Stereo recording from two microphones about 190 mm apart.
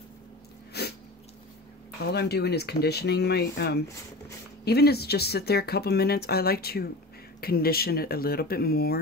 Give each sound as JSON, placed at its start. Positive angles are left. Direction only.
{"t": 0.7, "sound": "sneeze", "side_deg": 60}
{"t": 2.0, "sound": "speech", "side_deg": 60}